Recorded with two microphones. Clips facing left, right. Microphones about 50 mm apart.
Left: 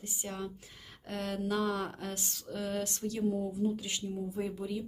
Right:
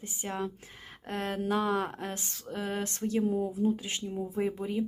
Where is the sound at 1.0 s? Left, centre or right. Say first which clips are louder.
Right 3 dB; right.